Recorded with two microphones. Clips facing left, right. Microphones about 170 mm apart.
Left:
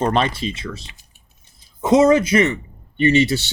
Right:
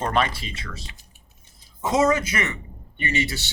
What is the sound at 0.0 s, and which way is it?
A man's voice, 25° left (ahead or behind).